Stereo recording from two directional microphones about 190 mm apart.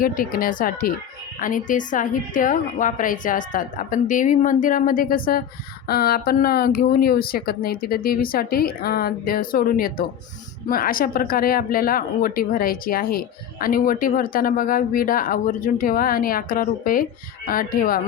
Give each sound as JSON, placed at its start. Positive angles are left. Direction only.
{"t": 0.0, "sound": "speech", "side_deg": 50}